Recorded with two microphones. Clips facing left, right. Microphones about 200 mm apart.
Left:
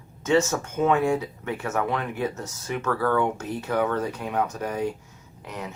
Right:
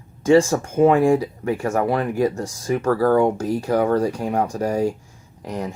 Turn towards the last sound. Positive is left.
turn(degrees=-35)  # may be behind; listen again after turning